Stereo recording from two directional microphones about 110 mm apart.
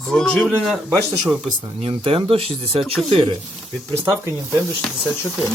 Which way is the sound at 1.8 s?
55° right (ahead or behind).